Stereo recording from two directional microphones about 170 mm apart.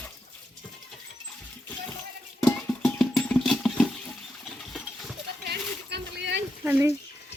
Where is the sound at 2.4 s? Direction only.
5° left (ahead or behind).